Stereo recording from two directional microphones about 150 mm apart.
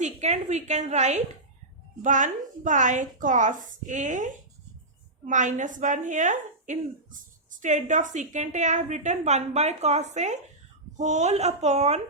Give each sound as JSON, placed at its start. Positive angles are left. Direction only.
{"t": 0.0, "sound": "a woman's voice", "side_deg": -50}